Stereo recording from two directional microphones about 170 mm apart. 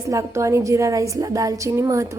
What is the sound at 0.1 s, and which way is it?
A woman's voice, 20° right (ahead or behind).